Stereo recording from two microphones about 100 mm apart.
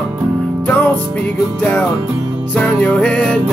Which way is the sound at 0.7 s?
15° left (ahead or behind).